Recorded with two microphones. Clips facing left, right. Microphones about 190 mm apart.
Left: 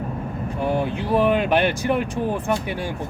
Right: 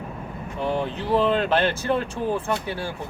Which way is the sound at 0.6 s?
10° left (ahead or behind).